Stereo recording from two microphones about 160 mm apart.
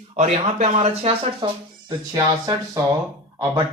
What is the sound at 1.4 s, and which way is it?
Speech, 30° right (ahead or behind).